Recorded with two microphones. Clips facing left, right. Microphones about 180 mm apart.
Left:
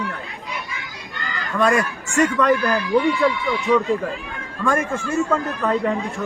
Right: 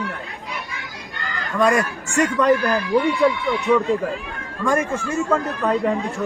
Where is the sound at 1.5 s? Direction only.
Centre (ahead or behind).